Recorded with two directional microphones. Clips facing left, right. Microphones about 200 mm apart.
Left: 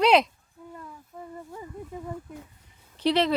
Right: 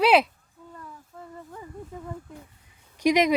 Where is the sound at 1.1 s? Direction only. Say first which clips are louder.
Left 3 dB; 15° left (ahead or behind).